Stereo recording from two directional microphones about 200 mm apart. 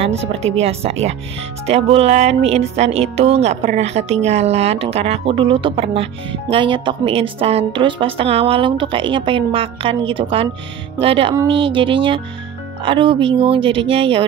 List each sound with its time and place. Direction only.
0.0 s a woman's voice: 30° right (ahead or behind)